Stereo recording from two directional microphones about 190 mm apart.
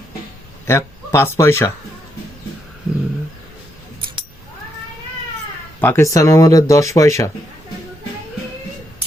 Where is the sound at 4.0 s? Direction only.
25° right (ahead or behind).